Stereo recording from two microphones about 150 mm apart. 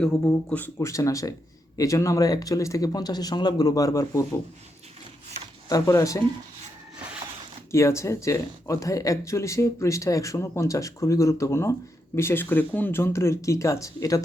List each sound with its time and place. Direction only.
0.0 s speech: 10° left (ahead or behind)
5.6 s speech: 25° left (ahead or behind)
7.7 s speech: 20° left (ahead or behind)